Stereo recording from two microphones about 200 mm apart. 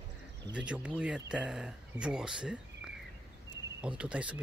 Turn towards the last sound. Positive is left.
turn(degrees=-5)  # may be behind; listen again after turning